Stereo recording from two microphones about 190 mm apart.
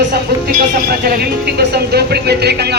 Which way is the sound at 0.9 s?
50° right (ahead or behind).